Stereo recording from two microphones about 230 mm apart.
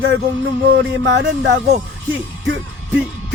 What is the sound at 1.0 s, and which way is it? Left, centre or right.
Speech, right.